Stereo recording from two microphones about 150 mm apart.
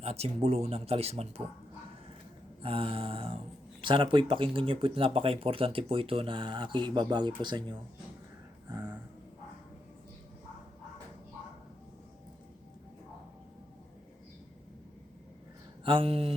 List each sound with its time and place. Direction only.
0.0 s speech: 40° right (ahead or behind)
2.6 s speech: 40° right (ahead or behind)
15.8 s speech: 35° right (ahead or behind)